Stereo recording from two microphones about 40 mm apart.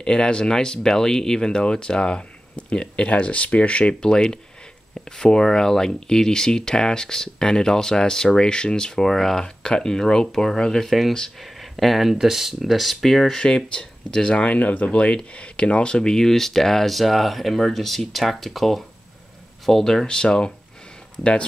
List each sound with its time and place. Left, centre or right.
0.0 s speech: left
4.1 s speech: centre
13.4 s speech: left
14.6 s speech: left